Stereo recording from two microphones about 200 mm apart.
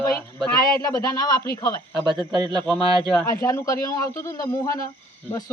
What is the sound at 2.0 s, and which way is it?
Speech, 20° right (ahead or behind).